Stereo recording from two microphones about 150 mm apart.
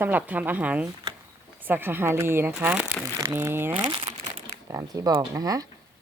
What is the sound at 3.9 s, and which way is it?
Crumpling, 35° right (ahead or behind).